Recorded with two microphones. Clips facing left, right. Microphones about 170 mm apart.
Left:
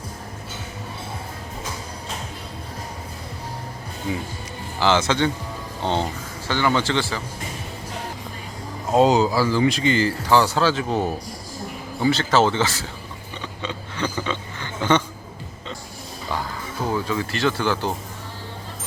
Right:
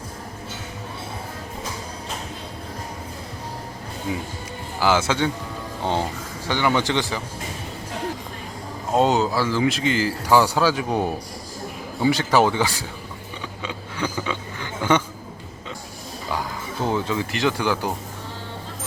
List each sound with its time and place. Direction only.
4.8 s speech: 10° right (ahead or behind)
8.9 s speech: centre (ahead or behind)
13.6 s a sound: 10° right (ahead or behind)
16.8 s speech: 20° right (ahead or behind)